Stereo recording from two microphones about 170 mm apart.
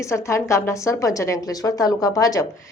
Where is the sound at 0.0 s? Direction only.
15° left (ahead or behind).